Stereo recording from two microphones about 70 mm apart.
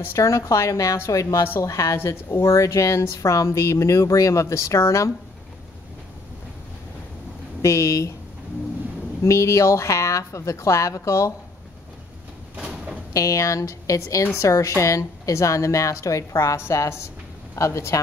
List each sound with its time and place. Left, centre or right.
0.1 s a woman's voice: left
7.6 s a woman's voice: left
9.2 s a woman's voice: left
12.5 s sliding door: centre
13.1 s a woman's voice: left